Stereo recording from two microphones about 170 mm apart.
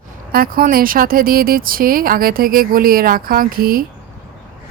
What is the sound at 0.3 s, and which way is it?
Speech, 60° right (ahead or behind).